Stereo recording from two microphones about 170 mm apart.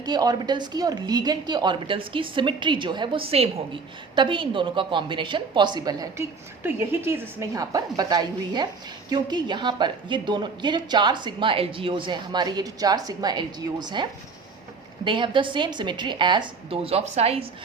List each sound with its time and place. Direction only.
0.0 s a woman's voice: 25° right (ahead or behind)